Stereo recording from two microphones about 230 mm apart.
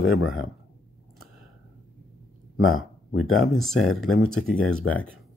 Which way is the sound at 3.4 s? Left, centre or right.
Centre.